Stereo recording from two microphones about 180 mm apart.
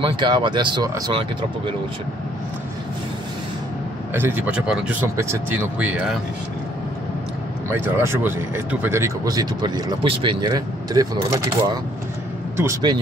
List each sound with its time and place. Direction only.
0.0 s speech: 25° right (ahead or behind)
4.1 s speech: 10° right (ahead or behind)
5.0 s speech: 15° right (ahead or behind)
7.7 s speech: 10° right (ahead or behind)